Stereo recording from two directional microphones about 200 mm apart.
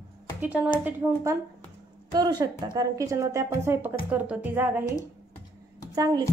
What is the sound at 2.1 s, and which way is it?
A woman's voice, 20° right (ahead or behind).